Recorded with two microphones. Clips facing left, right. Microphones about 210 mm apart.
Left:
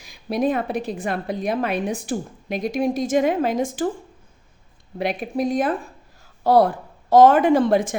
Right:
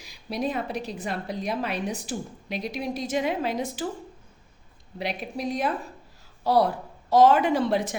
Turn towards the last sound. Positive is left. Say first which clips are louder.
# left 7 dB
turn(degrees=50)  # may be behind; listen again after turning